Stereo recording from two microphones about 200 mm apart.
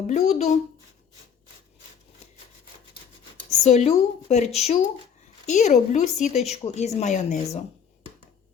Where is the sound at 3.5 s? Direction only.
35° left (ahead or behind).